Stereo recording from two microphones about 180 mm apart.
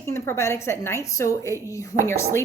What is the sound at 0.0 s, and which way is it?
A woman's voice, 15° left (ahead or behind).